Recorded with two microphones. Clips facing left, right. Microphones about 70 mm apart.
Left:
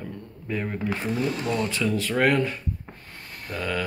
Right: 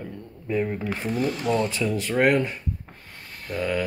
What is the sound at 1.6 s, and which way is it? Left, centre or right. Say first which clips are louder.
Speech: even; right.